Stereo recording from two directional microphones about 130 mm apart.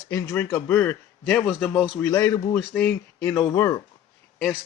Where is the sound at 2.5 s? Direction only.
10° left (ahead or behind).